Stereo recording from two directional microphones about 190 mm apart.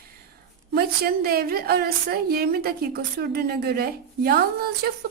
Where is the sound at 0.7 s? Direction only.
55° right (ahead or behind).